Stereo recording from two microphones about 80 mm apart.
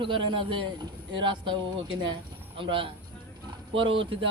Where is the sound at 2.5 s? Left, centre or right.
Right.